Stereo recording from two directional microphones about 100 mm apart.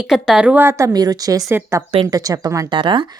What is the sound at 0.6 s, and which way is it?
Speech, 30° right (ahead or behind).